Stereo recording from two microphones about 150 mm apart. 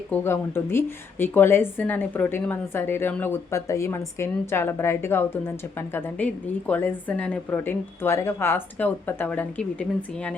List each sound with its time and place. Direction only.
0.1 s speech: 15° left (ahead or behind)